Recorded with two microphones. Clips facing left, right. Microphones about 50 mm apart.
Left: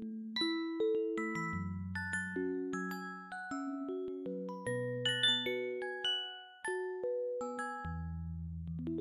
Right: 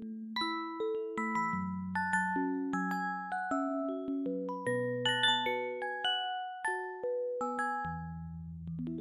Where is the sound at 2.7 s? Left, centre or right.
Centre.